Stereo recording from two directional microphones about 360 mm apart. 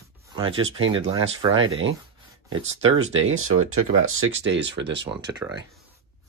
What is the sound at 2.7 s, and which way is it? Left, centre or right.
Speech, right.